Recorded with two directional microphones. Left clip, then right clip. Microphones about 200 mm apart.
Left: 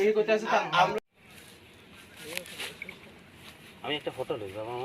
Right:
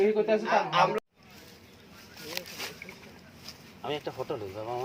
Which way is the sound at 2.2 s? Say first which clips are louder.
Even; 45° right (ahead or behind).